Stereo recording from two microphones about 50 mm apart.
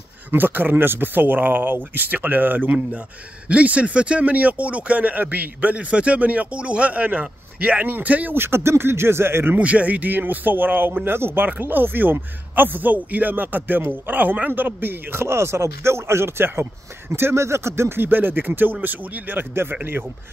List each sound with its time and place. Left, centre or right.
0.3 s a man's voice: right
3.4 s speech: right
8.4 s speech: right
9.6 s a man's voice: right
15.2 s speech: right